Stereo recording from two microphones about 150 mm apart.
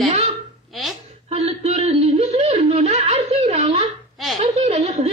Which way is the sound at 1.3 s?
45° right (ahead or behind).